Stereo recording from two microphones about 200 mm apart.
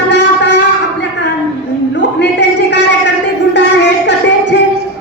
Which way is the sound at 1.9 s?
60° left (ahead or behind).